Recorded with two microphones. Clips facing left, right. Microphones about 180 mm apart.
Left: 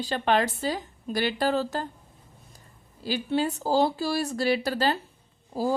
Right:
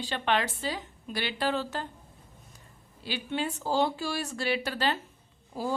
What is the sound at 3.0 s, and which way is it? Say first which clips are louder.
Speech: left 6 dB; 40° left (ahead or behind).